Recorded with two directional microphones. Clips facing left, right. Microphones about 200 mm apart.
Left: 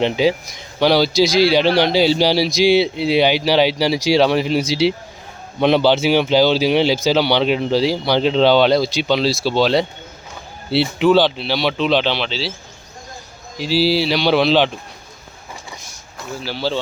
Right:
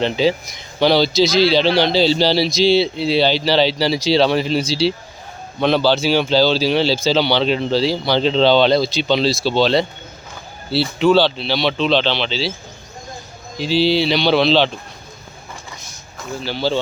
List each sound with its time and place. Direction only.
0.0 s speech: 15° left (ahead or behind)
11.0 s speech: 10° left (ahead or behind)
13.6 s speech: 5° left (ahead or behind)
16.4 s speech: 5° left (ahead or behind)